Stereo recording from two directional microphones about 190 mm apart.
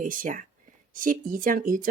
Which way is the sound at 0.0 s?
45° right (ahead or behind).